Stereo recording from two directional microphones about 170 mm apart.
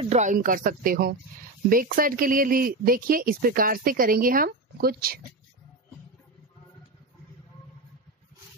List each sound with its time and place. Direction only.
0.0 s speech: 40° right (ahead or behind); by 5.2 s 60° right (ahead or behind)